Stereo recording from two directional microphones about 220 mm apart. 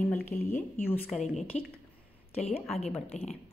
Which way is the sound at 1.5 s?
30° left (ahead or behind).